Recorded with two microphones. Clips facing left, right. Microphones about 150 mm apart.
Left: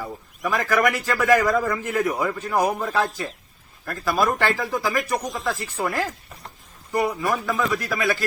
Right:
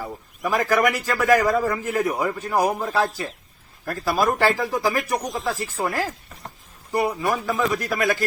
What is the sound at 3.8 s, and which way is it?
Speech, 30° right (ahead or behind).